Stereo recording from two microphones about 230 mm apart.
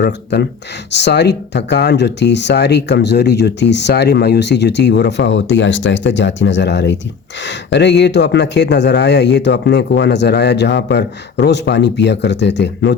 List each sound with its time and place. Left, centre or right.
0.0 s speech: left